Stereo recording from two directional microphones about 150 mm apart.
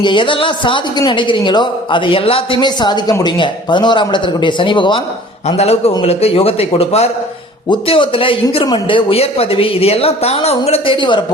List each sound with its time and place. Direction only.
0.0 s speech: 35° left (ahead or behind)
5.5 s a man's voice: 45° left (ahead or behind)